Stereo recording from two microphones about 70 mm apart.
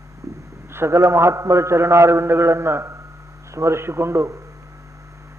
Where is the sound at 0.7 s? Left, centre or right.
Right.